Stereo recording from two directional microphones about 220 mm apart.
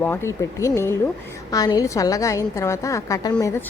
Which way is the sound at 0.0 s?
10° left (ahead or behind).